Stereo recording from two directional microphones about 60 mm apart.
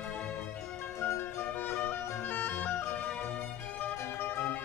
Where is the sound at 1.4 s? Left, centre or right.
Left.